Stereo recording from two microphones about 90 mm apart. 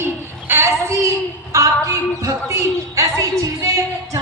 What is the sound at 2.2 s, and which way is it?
Speech, 35° right (ahead or behind).